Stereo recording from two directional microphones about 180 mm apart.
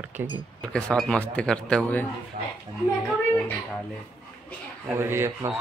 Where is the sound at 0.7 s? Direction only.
5° left (ahead or behind).